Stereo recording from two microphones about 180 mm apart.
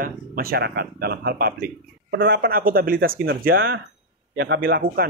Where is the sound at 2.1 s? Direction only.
70° right (ahead or behind).